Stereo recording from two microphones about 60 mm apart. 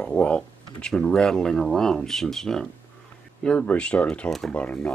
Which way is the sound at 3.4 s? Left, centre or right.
Centre.